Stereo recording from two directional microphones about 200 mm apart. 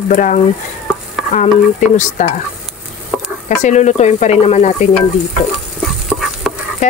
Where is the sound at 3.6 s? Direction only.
35° left (ahead or behind).